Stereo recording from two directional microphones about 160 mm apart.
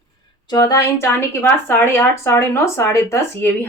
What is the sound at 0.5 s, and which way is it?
Speech, 25° left (ahead or behind).